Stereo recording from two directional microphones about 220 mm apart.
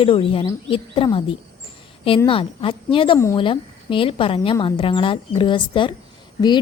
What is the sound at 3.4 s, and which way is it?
A woman's voice, 25° left (ahead or behind).